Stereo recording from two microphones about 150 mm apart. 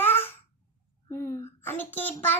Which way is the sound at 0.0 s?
15° left (ahead or behind).